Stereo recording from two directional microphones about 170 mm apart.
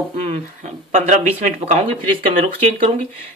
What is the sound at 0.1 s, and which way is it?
Speech, 45° right (ahead or behind).